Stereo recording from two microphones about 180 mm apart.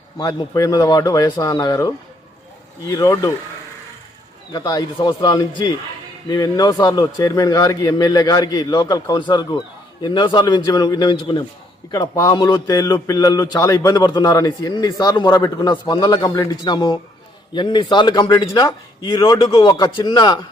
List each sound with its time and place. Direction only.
0.2 s speech: 20° left (ahead or behind)
4.5 s speech: 20° left (ahead or behind)